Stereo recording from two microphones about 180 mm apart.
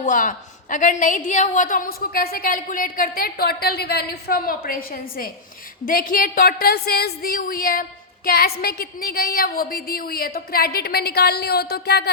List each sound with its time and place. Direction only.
0.0 s a woman's voice: 45° left (ahead or behind); by 12.1 s 65° left (ahead or behind)